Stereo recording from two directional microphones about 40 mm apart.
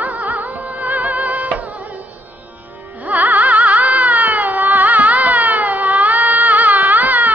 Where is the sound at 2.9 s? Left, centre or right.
Right.